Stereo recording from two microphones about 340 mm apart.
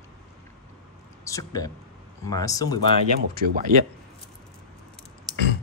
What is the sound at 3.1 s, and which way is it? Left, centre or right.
Speech, right.